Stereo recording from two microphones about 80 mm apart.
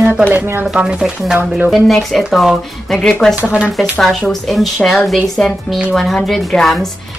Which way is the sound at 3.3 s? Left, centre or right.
Centre.